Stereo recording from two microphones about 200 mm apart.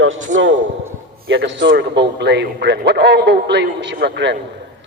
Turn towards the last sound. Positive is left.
turn(degrees=-60)  # may be behind; listen again after turning